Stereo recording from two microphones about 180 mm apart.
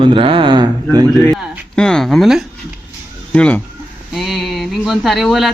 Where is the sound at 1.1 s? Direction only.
Centre (ahead or behind).